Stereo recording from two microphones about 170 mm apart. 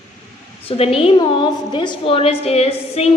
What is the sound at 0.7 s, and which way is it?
A woman's voice, 35° left (ahead or behind).